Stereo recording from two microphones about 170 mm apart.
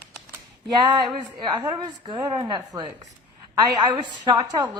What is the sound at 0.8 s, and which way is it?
A woman's voice, 25° right (ahead or behind).